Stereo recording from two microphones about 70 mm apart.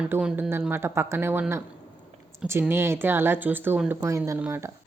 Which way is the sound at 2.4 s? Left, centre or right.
Right.